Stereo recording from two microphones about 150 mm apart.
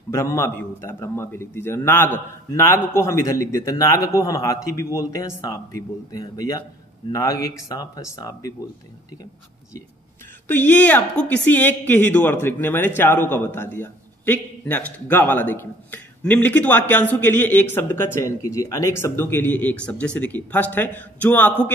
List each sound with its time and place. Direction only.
0.1 s a woman's voice: 20° left (ahead or behind)
10.5 s a woman's voice: 10° left (ahead or behind)